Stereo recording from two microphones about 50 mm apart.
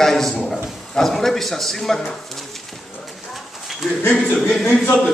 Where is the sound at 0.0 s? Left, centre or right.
Centre.